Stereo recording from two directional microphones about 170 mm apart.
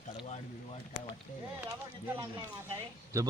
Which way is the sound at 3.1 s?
20° right (ahead or behind).